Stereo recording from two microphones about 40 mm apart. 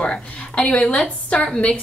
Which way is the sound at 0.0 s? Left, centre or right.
Left.